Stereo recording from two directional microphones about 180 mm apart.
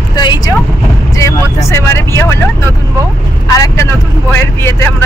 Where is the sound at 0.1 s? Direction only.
20° left (ahead or behind).